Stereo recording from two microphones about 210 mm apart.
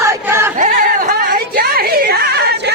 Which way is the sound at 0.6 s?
40° right (ahead or behind).